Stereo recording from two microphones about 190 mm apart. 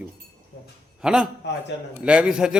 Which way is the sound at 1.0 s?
5° right (ahead or behind).